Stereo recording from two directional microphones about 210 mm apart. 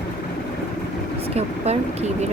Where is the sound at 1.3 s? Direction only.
30° right (ahead or behind).